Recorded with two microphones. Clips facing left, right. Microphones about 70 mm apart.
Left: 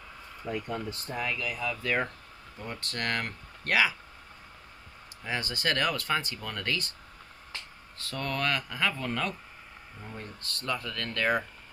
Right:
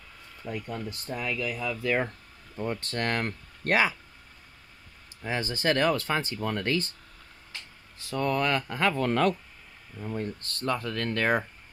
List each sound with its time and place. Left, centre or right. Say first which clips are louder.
0.5 s speech: left 1 dB; centre
2.6 s speech: right 5 dB; right
5.2 s speech: right 3 dB; right
8.0 s speech: right 5 dB; centre
8.5 s speech: right 5 dB; right
10.1 s speech: right 8 dB; right